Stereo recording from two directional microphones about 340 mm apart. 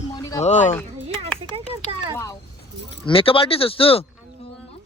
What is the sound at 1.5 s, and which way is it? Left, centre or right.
Speech, centre.